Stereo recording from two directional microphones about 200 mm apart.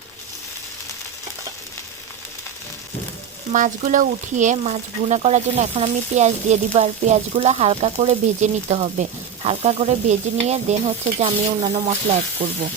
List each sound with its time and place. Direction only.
3.5 s speech: 40° right (ahead or behind)